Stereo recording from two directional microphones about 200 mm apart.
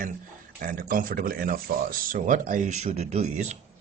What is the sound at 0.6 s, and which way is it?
Mantra, 45° right (ahead or behind).